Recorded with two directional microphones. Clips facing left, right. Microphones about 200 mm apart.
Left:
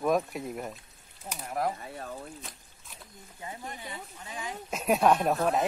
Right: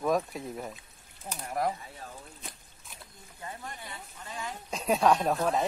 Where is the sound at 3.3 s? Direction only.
15° left (ahead or behind).